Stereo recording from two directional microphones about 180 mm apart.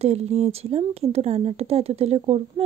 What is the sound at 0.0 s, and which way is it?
Speech, 35° right (ahead or behind).